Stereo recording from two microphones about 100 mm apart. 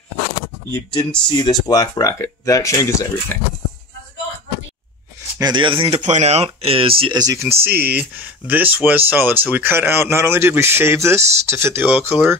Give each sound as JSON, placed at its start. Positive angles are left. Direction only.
{"t": 0.9, "sound": "speech", "side_deg": 50}
{"t": 5.4, "sound": "speech", "side_deg": -50}
{"t": 7.2, "sound": "speech", "side_deg": -35}
{"t": 7.4, "sound": "speech", "side_deg": -20}